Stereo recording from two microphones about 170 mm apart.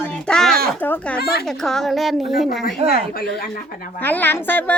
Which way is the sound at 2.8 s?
35° right (ahead or behind).